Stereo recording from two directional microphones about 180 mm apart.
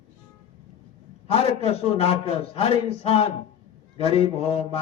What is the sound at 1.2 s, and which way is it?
Speech, 30° left (ahead or behind).